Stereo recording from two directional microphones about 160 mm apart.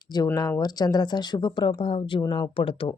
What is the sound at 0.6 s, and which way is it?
Speech, 25° left (ahead or behind).